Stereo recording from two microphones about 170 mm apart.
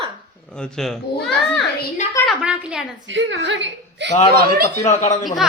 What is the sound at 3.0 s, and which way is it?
A woman's voice, 90° right.